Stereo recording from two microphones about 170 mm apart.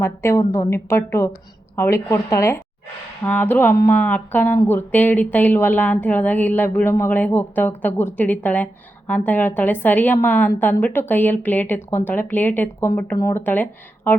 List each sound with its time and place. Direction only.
0.0 s speech: 15° left (ahead or behind)